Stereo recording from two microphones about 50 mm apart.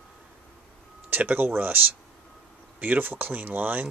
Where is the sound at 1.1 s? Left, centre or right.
Right.